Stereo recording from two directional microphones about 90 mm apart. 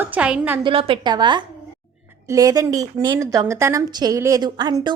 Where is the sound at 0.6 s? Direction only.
85° right.